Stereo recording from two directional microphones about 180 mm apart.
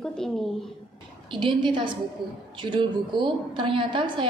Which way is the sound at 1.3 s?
25° right (ahead or behind).